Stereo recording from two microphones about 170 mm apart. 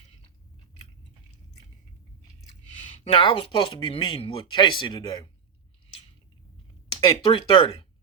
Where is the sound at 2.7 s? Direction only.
30° left (ahead or behind).